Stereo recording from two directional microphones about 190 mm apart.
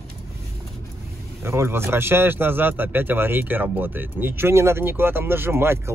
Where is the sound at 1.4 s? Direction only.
15° right (ahead or behind).